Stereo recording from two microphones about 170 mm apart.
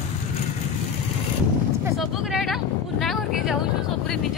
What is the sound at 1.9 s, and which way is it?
Vehicle, centre (ahead or behind).